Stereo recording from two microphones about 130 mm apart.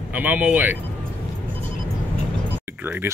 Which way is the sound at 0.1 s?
10° right (ahead or behind).